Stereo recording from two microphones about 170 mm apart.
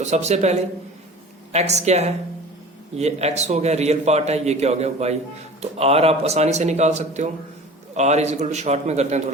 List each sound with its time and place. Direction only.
0.0 s a man's voice: 40° right (ahead or behind)
1.5 s a man's voice: 40° right (ahead or behind)